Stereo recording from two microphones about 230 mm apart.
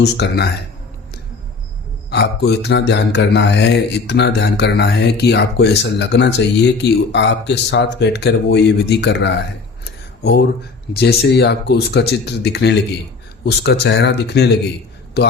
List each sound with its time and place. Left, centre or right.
0.0 s mantra: left
2.0 s mantra: left
10.9 s mantra: left